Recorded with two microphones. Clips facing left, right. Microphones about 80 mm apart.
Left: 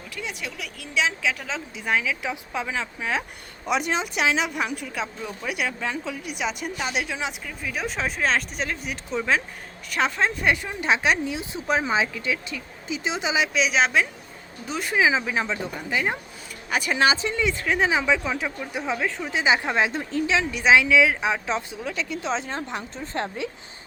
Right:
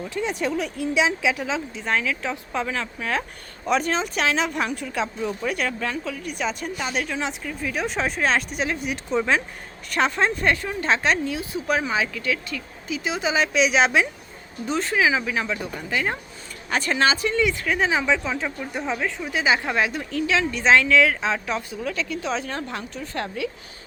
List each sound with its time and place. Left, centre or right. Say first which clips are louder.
0.1 s speech: right 8 dB; right
0.9 s a woman's voice: right 2 dB; centre
1.8 s a woman's voice: left 2 dB; centre
10.5 s a woman's voice: right 1 dB; centre
13.3 s speech: right 3 dB; centre
14.7 s a woman's voice: right 1 dB; centre
19.2 s a woman's voice: even; left
20.5 s a woman's voice: even; centre